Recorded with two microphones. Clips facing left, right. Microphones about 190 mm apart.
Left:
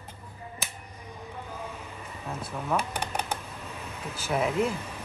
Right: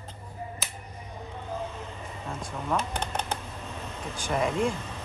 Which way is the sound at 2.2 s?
5° left (ahead or behind).